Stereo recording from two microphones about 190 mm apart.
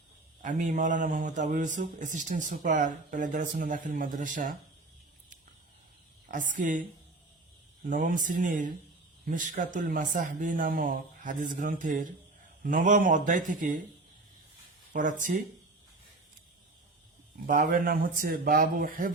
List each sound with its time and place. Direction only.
0.4 s a man's voice: 40° right (ahead or behind)
6.2 s a woman's voice: 45° right (ahead or behind)
7.9 s a man's voice: 45° right (ahead or behind)
14.9 s a man's voice: 45° right (ahead or behind)
17.4 s a man's voice: 45° right (ahead or behind)